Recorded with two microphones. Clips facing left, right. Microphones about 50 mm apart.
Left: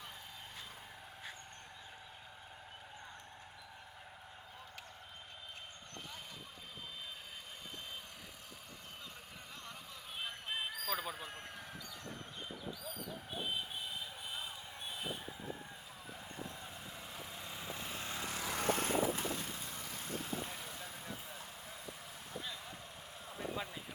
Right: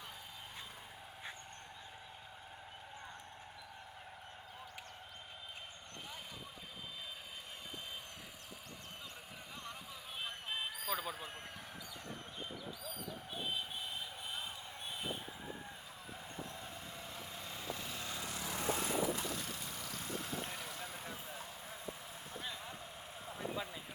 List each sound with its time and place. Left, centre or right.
10.2 s a sound: centre
14.3 s a sound: centre
17.2 s vehicle: centre
17.7 s vehicle: left
20.7 s vehicle: right
23.6 s vehicle: centre